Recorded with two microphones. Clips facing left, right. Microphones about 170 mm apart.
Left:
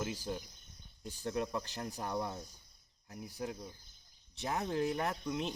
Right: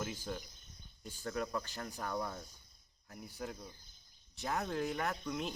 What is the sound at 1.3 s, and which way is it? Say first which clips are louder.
Speech: left 2 dB; 20° left (ahead or behind).